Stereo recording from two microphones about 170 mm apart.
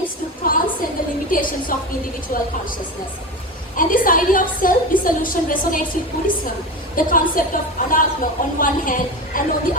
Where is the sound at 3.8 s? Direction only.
55° left (ahead or behind).